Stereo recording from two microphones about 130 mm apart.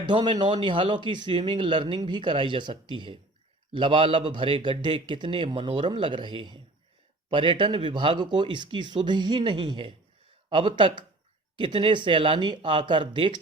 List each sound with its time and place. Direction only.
0.0 s a man's voice: 35° right (ahead or behind)